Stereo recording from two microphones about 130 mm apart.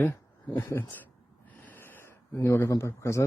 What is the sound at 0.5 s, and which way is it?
Speech, 15° left (ahead or behind).